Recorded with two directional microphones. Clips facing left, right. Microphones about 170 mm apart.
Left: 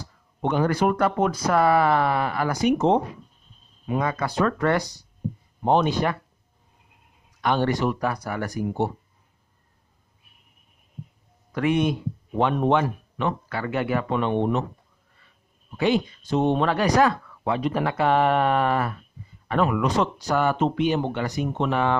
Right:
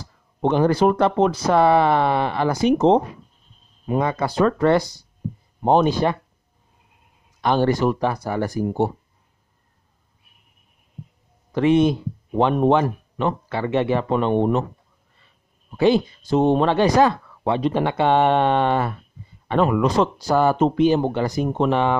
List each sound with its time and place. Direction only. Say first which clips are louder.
0.4 s speech: right 5 dB; 30° right (ahead or behind)
4.0 s speech: right 4 dB; 25° right (ahead or behind)
5.6 s speech: right 4 dB; 40° right (ahead or behind)
7.4 s speech: right 4 dB; 35° right (ahead or behind)
11.5 s speech: right 6 dB; 30° right (ahead or behind)
15.8 s speech: right 5 dB; 35° right (ahead or behind)